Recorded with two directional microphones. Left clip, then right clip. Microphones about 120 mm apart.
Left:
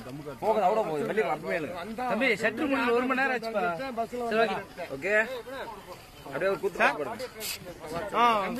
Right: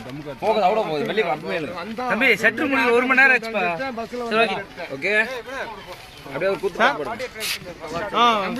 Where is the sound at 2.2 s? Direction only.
65° left (ahead or behind); by 3.2 s 50° left (ahead or behind).